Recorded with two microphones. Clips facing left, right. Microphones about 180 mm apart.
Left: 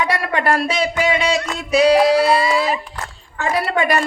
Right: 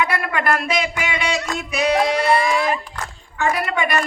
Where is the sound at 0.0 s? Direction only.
35° left (ahead or behind).